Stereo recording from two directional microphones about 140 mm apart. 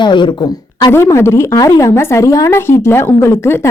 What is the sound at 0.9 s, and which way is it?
Speech, 20° left (ahead or behind).